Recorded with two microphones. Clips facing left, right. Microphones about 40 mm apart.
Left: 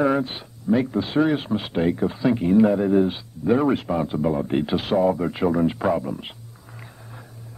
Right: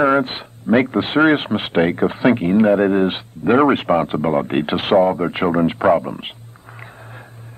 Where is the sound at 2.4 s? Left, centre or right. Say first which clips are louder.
Even; right.